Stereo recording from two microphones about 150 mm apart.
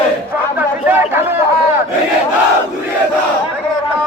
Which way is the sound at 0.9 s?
10° right (ahead or behind).